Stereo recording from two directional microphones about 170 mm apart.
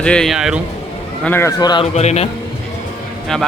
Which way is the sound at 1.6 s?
25° left (ahead or behind).